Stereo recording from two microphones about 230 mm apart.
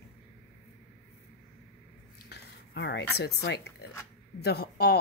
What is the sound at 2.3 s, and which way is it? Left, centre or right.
Speech, left.